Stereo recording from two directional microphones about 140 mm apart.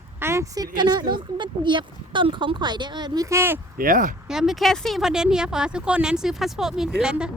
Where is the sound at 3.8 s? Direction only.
80° right.